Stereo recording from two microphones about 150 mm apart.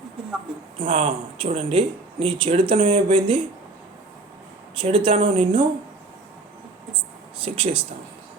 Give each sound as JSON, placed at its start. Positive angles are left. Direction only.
{"t": 0.8, "sound": "speech", "side_deg": -50}
{"t": 4.8, "sound": "speech", "side_deg": -35}
{"t": 7.4, "sound": "speech", "side_deg": -40}